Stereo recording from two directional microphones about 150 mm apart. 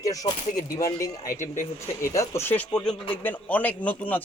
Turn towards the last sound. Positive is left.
turn(degrees=10)  # may be behind; listen again after turning